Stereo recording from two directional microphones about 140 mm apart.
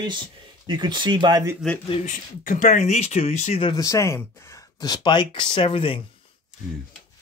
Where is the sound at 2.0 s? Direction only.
70° left (ahead or behind); by 3.6 s 55° left (ahead or behind).